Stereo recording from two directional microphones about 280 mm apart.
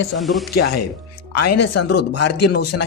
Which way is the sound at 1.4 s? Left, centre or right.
Left.